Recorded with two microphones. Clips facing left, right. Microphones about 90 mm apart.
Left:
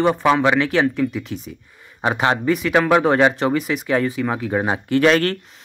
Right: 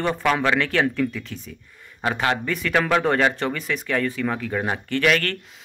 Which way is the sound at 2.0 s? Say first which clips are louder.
Left 4 dB; 25° left (ahead or behind).